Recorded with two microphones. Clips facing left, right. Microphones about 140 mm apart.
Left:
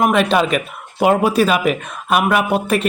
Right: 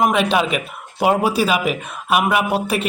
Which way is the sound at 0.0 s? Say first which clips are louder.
Left 2 dB; 55° left (ahead or behind).